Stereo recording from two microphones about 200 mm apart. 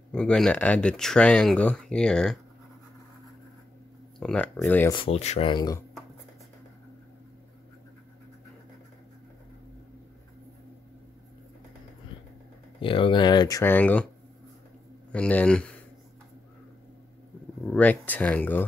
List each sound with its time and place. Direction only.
0.1 s speech: 5° left (ahead or behind)
4.2 s speech: 5° left (ahead or behind)
4.9 s speech: 30° left (ahead or behind)
12.8 s speech: 25° left (ahead or behind); by 14.0 s 10° left (ahead or behind)
15.1 s speech: 5° left (ahead or behind)
17.6 s speech: 10° left (ahead or behind)